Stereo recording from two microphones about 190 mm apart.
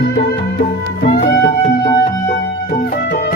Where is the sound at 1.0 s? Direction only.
60° left (ahead or behind).